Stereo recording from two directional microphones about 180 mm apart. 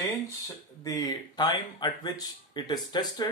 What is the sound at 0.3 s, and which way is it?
Speech, 20° left (ahead or behind).